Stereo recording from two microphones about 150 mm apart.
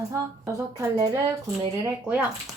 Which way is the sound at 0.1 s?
20° right (ahead or behind).